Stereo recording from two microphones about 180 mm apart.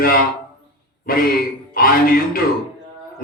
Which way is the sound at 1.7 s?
55° left (ahead or behind).